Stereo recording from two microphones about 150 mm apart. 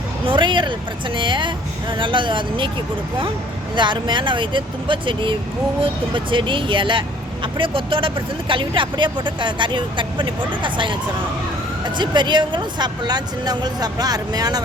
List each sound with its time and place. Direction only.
0.3 s speech: 30° right (ahead or behind)
3.8 s speech: 30° right (ahead or behind)
11.9 s speech: 30° right (ahead or behind)